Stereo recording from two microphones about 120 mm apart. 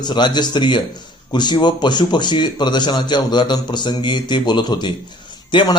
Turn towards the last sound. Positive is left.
turn(degrees=40)  # may be behind; listen again after turning